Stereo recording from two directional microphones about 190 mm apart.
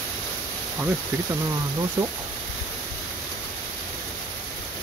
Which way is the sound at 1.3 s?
20° right (ahead or behind).